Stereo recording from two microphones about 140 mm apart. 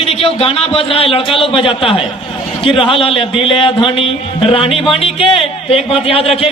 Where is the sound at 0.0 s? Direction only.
45° left (ahead or behind).